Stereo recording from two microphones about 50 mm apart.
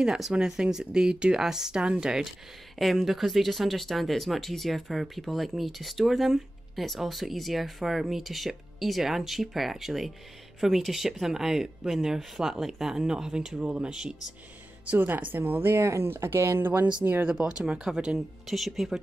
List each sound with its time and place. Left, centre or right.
0.0 s speech: centre
2.8 s speech: centre
15.0 s speech: right
15.7 s speech: right
16.1 s speech: right
17.2 s speech: centre
18.5 s speech: centre